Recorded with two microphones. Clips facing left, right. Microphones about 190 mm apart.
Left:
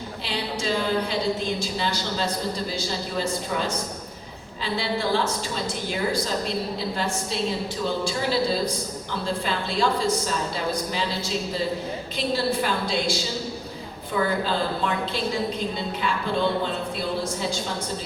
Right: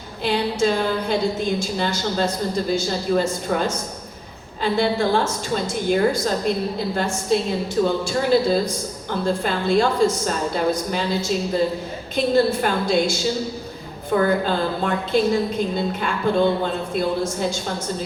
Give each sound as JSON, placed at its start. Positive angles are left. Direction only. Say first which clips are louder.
{"t": 0.3, "sound": "a woman's voice", "louder": "right 8 dB", "side_deg": -50}